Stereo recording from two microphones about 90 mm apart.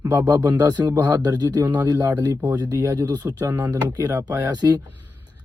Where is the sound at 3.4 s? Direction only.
25° right (ahead or behind).